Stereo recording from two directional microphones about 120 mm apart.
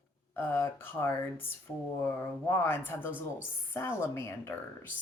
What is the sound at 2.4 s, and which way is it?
A woman's voice, 20° left (ahead or behind).